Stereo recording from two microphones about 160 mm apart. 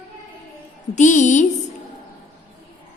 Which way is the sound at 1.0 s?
50° left (ahead or behind).